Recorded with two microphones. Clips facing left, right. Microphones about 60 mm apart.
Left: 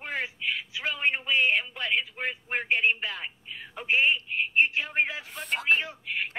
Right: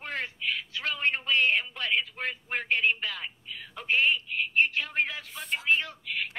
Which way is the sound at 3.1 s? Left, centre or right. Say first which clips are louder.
Left 1 dB; left.